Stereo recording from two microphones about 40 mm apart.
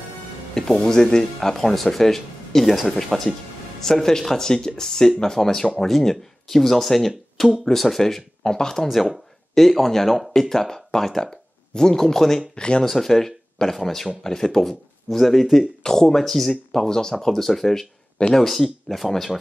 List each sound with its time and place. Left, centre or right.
0.6 s speech: centre
8.8 s speech: centre
12.5 s speech: left
12.8 s speech: centre